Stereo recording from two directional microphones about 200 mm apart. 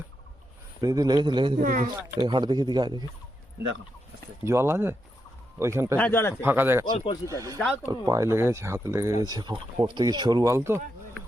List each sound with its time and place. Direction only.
0.8 s speech: 20° right (ahead or behind)
1.5 s speech: 40° right (ahead or behind)
2.1 s speech: 20° right (ahead or behind)
4.4 s speech: 15° right (ahead or behind)
6.0 s speech: 10° left (ahead or behind)
6.4 s speech: 10° right (ahead or behind)
6.8 s speech: 25° left (ahead or behind)
7.3 s speech: 15° right (ahead or behind)
7.6 s speech: 5° left (ahead or behind)
7.9 s speech: 15° right (ahead or behind)